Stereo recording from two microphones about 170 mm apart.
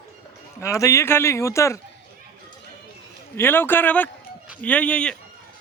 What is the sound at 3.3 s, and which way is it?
A man's voice, 10° left (ahead or behind).